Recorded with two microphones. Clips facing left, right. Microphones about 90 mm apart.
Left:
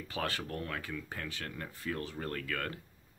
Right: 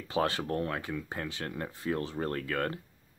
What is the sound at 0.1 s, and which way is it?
Speech, 25° right (ahead or behind).